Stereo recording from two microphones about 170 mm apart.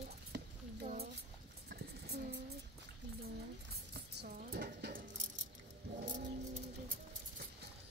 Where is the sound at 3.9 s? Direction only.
75° right (ahead or behind).